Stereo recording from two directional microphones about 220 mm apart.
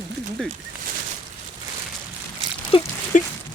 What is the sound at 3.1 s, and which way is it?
Speech, 35° left (ahead or behind).